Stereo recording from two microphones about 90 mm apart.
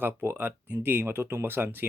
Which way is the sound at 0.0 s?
25° right (ahead or behind).